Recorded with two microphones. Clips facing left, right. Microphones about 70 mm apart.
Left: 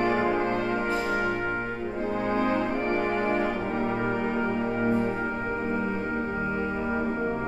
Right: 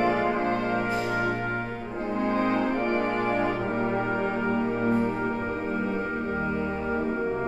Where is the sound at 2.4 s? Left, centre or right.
Centre.